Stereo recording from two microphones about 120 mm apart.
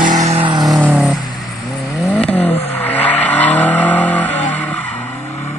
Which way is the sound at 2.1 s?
10° left (ahead or behind).